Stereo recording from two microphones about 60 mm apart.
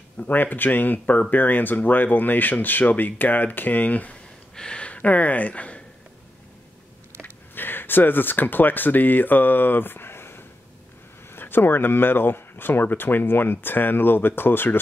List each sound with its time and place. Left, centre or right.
0.2 s speech: left
7.2 s speech: left